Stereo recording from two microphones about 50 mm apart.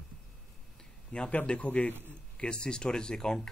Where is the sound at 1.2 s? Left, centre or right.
Left.